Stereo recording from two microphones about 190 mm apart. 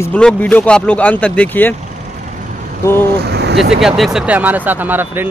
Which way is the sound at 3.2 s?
60° right (ahead or behind).